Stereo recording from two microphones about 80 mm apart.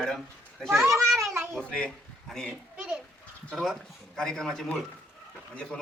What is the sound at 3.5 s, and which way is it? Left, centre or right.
A man's voice, centre.